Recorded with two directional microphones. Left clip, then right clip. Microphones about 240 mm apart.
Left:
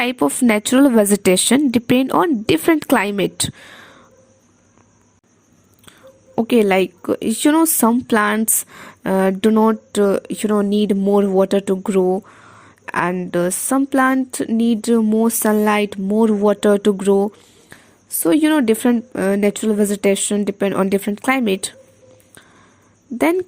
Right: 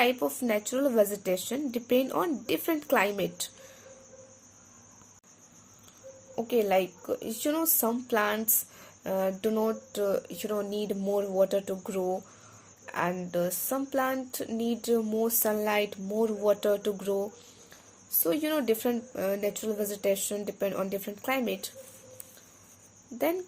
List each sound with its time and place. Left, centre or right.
0.0 s speech: left
6.3 s speech: left
23.1 s speech: left